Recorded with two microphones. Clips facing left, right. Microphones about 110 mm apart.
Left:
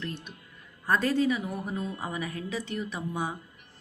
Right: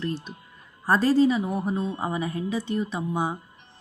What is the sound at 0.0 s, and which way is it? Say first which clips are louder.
Speech: right 7 dB; 30° right (ahead or behind).